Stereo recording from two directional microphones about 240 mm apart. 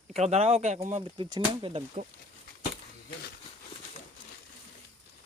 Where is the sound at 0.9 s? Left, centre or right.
Right.